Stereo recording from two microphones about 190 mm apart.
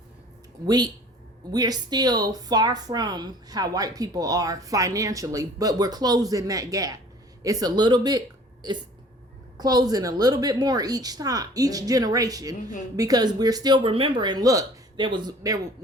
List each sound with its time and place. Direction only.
1.5 s speech: 20° right (ahead or behind)